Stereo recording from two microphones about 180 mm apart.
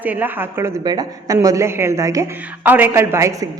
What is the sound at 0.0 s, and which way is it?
A woman's voice, 10° right (ahead or behind).